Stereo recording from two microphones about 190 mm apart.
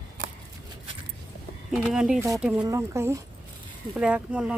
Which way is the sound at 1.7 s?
Centre (ahead or behind).